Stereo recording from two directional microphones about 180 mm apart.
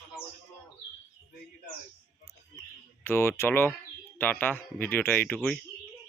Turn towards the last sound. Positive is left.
turn(degrees=5)  # may be behind; listen again after turning